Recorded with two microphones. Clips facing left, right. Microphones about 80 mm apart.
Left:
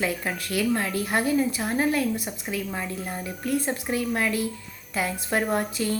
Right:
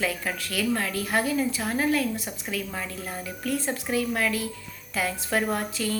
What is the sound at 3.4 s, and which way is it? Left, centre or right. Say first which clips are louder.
Speech: left 2 dB; left.